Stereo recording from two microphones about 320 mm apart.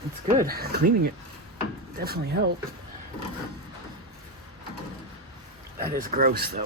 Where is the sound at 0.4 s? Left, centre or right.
Right.